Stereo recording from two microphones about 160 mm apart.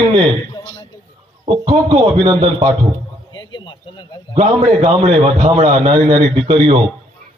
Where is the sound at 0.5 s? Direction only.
35° left (ahead or behind).